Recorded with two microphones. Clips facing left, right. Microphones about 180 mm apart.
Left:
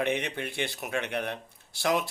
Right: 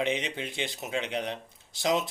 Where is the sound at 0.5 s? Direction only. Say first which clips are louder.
Even; 20° right (ahead or behind).